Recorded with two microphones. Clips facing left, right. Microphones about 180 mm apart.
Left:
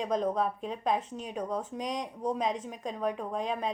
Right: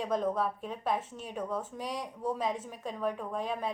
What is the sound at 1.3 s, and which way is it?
Speech, 35° left (ahead or behind).